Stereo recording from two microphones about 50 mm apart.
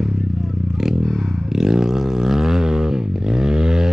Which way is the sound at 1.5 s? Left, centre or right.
Centre.